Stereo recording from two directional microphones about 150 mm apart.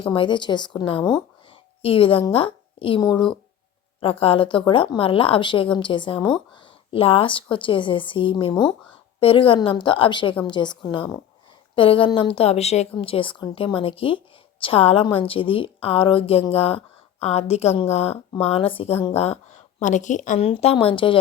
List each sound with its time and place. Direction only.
0.1 s a woman's voice: 30° left (ahead or behind); by 20.4 s 55° left (ahead or behind)
20.4 s a woman's voice: 45° left (ahead or behind)